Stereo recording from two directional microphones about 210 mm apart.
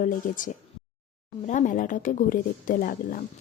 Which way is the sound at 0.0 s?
40° left (ahead or behind).